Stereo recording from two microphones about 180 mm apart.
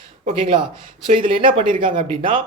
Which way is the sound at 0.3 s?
30° right (ahead or behind).